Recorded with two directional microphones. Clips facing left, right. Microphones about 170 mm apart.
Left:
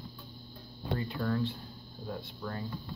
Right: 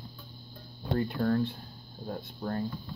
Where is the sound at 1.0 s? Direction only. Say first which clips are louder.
Right 5 dB; 45° right (ahead or behind).